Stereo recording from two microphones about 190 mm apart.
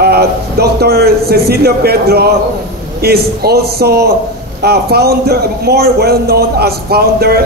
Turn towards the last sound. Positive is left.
turn(degrees=-55)  # may be behind; listen again after turning